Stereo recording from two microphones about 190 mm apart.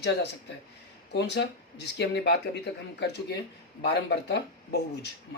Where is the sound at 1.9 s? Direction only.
65° left (ahead or behind).